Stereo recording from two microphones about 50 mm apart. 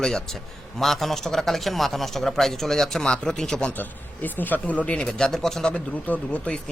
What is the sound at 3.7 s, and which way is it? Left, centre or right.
Speech, left.